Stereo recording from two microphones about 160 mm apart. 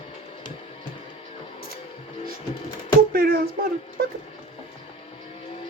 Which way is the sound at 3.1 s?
65° right (ahead or behind).